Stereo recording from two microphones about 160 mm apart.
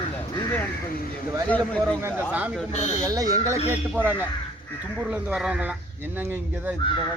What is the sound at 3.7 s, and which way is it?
Speech, 10° right (ahead or behind).